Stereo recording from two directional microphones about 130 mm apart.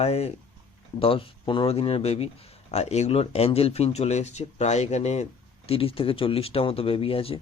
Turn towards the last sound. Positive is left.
turn(degrees=45)  # may be behind; listen again after turning